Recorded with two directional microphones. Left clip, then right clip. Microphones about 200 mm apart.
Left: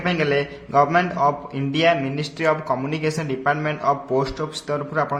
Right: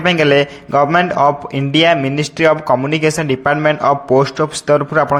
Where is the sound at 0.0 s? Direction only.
40° right (ahead or behind).